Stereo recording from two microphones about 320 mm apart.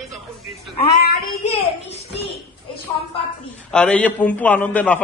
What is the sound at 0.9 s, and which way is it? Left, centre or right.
A child's voice, left.